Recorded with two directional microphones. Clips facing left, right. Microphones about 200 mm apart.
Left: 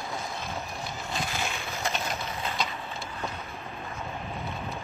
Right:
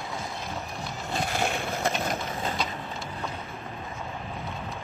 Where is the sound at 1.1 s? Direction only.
55° right (ahead or behind).